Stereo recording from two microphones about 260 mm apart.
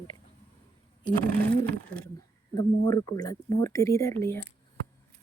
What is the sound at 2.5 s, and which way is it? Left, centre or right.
Speech, centre.